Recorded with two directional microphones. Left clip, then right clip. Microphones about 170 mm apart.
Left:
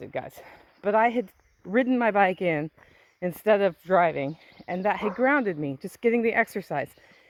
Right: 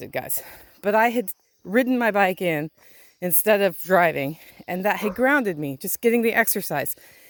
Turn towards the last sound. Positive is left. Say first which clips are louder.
# right 3 dB
turn(degrees=-55)  # may be behind; listen again after turning